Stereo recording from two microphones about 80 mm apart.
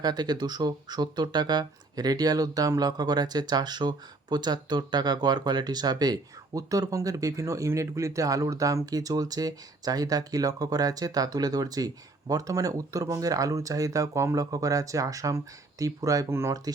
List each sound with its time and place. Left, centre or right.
0.0 s speech: right